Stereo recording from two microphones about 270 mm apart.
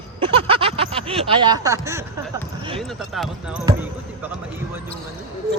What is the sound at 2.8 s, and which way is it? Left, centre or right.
Speech, centre.